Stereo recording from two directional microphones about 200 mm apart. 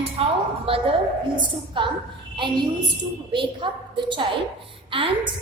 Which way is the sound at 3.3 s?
25° right (ahead or behind).